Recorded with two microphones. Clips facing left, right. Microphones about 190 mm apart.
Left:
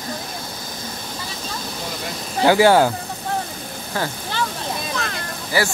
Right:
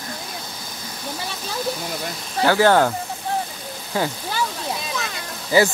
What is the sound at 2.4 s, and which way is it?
Speech, 15° left (ahead or behind).